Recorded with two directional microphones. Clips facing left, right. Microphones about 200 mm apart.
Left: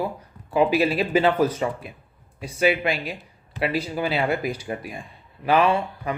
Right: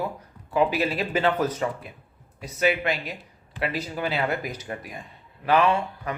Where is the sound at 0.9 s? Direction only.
10° left (ahead or behind).